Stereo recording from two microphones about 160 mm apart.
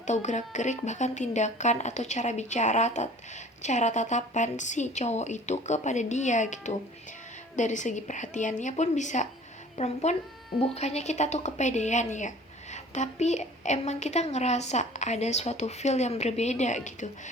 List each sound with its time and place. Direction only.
0.1 s a woman's voice: 45° left (ahead or behind)